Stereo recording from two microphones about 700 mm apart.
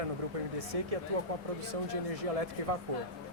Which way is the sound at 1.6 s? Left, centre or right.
Right.